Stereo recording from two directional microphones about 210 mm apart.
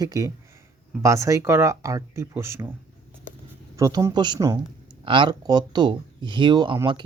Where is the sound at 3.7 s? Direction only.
15° right (ahead or behind).